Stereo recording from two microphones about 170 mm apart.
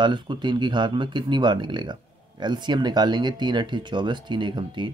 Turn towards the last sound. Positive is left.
turn(degrees=-25)  # may be behind; listen again after turning